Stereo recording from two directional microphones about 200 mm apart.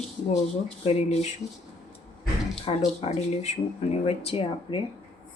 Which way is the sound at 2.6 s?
30° left (ahead or behind).